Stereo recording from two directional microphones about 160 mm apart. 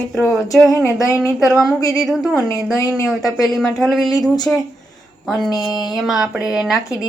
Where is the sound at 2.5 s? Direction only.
20° left (ahead or behind).